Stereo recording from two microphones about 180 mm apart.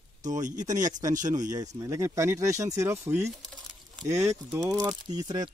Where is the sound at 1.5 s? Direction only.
20° right (ahead or behind).